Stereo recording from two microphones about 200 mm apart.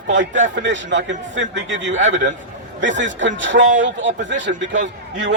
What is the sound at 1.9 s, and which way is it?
Speech, 35° right (ahead or behind).